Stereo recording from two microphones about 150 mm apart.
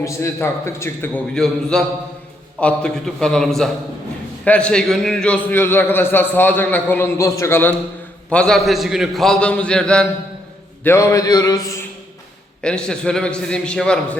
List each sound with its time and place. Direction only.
0.0 s a man's voice: 20° left (ahead or behind)
10.8 s mantra: 20° left (ahead or behind)
12.6 s a man's voice: 5° left (ahead or behind)